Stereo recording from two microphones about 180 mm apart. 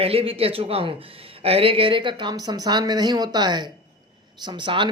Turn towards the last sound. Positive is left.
turn(degrees=-25)  # may be behind; listen again after turning